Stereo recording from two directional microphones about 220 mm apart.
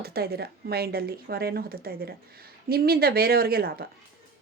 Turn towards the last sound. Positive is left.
turn(degrees=-45)  # may be behind; listen again after turning